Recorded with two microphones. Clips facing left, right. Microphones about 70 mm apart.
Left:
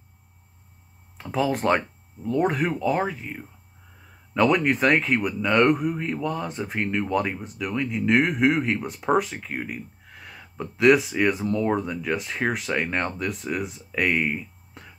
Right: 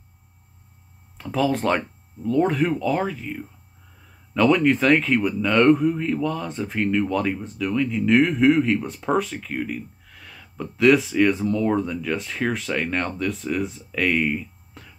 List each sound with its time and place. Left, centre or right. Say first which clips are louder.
1.1 s a man's voice: right 2 dB; centre